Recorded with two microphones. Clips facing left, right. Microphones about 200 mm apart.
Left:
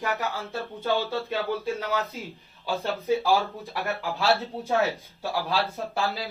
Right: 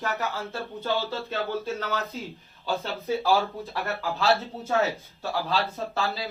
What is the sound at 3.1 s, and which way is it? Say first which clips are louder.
Speech: even; 15° left (ahead or behind).